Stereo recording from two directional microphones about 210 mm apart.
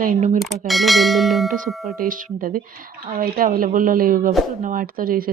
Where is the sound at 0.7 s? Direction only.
Centre (ahead or behind).